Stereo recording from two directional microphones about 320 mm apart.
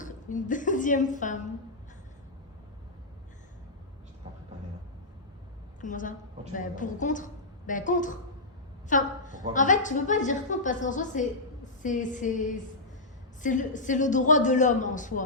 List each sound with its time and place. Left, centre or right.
0.0 s a woman's voice: left
5.8 s a woman's voice: left